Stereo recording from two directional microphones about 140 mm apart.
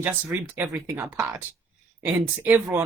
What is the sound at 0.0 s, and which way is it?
Speech, 15° right (ahead or behind).